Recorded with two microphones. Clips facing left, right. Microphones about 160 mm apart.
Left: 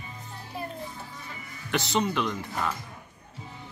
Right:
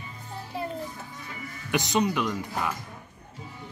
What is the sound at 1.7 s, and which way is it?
Speech, 15° right (ahead or behind).